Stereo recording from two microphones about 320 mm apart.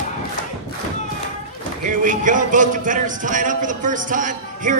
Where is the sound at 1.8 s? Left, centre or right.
Right.